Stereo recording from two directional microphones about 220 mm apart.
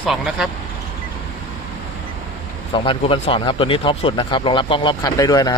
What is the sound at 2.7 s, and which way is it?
Speech, 25° left (ahead or behind).